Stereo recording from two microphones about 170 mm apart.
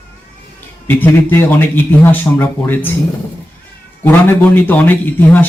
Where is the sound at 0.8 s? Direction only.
10° left (ahead or behind).